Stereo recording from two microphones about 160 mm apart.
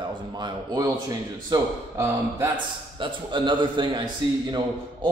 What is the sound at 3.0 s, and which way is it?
Speech, 30° right (ahead or behind).